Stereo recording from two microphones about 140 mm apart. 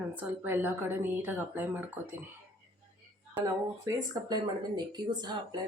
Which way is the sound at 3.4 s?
25° right (ahead or behind).